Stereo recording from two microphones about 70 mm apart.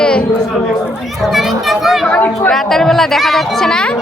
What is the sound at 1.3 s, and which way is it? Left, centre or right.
Speech, centre.